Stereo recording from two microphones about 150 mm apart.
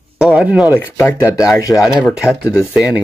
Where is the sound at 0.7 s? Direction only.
15° left (ahead or behind).